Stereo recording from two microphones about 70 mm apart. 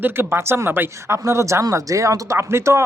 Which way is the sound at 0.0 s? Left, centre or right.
Right.